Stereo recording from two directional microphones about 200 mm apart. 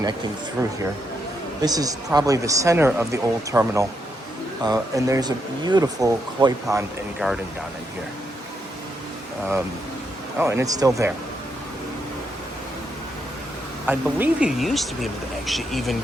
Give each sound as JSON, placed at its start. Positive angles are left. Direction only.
{"t": 1.6, "sound": "speech", "side_deg": -20}
{"t": 7.2, "sound": "speech", "side_deg": -5}
{"t": 10.3, "sound": "speech", "side_deg": -10}
{"t": 13.8, "sound": "speech", "side_deg": -10}